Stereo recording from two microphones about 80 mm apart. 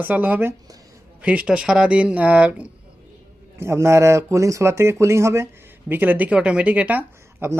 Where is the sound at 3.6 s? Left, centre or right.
Right.